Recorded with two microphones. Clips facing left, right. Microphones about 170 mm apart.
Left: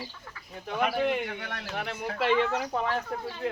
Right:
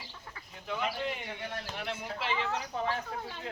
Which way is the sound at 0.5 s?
50° left (ahead or behind).